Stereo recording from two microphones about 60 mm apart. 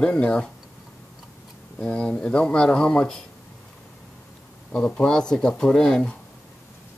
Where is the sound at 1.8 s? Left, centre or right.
Centre.